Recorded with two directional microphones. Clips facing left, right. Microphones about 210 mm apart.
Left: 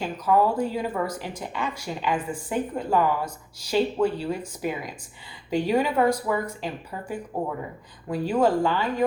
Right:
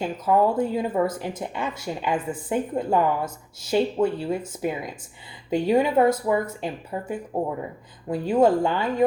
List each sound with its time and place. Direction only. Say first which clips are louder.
0.0 s speech: right 1 dB; 25° right (ahead or behind)